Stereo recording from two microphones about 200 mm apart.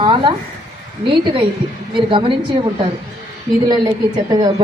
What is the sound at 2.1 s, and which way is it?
Speech, 25° right (ahead or behind).